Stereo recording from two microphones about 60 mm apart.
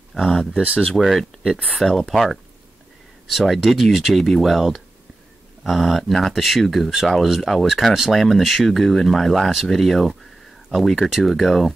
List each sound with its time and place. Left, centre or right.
0.1 s speech: centre
0.5 s speech: right
0.7 s speech: centre